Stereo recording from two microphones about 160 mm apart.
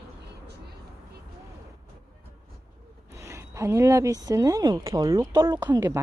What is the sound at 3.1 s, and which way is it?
A woman's voice, 20° right (ahead or behind).